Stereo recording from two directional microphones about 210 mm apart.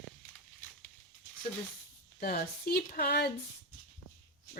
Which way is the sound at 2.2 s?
45° left (ahead or behind).